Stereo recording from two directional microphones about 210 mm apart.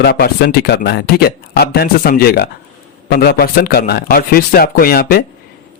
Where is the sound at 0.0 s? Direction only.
50° left (ahead or behind).